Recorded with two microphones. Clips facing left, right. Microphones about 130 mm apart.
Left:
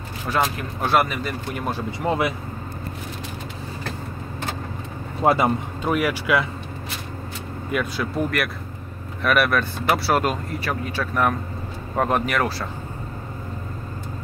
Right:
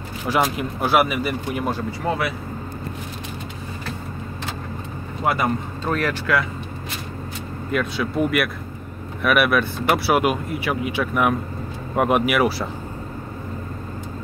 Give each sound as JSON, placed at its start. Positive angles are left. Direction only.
{"t": 0.3, "sound": "speech", "side_deg": -10}
{"t": 1.9, "sound": "speech", "side_deg": 20}
{"t": 5.2, "sound": "speech", "side_deg": 30}
{"t": 5.9, "sound": "speech", "side_deg": 10}
{"t": 7.7, "sound": "speech", "side_deg": 0}